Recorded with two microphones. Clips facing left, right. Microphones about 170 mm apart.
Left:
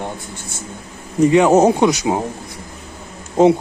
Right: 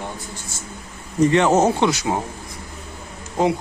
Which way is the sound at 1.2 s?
10° left (ahead or behind).